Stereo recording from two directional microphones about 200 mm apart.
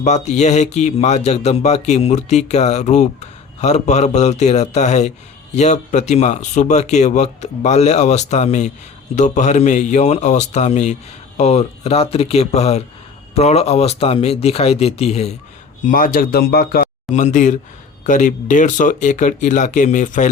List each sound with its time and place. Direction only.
0.0 s speech: 35° left (ahead or behind)
15.9 s speech: 45° left (ahead or behind)
17.1 s speech: 35° left (ahead or behind)